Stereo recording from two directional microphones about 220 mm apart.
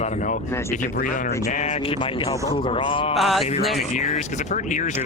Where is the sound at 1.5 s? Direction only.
30° left (ahead or behind).